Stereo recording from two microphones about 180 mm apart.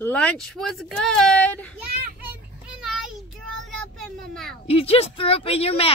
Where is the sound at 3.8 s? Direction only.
Centre (ahead or behind).